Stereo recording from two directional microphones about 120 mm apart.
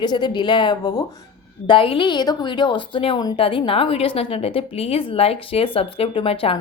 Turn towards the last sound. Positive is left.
turn(degrees=50)  # may be behind; listen again after turning